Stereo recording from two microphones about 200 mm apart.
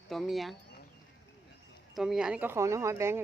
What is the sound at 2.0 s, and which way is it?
Speech, 5° right (ahead or behind).